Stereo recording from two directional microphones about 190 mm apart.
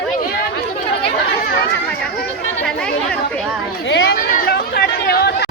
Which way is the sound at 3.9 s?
65° left (ahead or behind).